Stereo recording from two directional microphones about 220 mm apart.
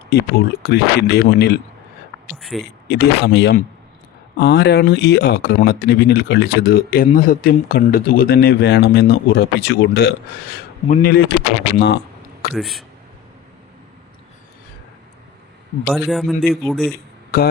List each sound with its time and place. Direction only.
0.1 s speech: 45° left (ahead or behind)
2.3 s a man's voice: centre (ahead or behind)
2.9 s speech: 50° left (ahead or behind)
12.5 s a man's voice: centre (ahead or behind)
15.9 s a man's voice: centre (ahead or behind)
16.9 s a sound: 45° left (ahead or behind)